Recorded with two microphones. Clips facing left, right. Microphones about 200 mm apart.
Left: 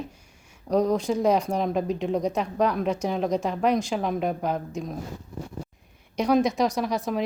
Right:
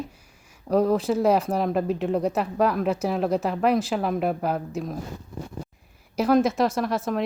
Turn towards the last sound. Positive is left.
turn(degrees=0)  # may be behind; listen again after turning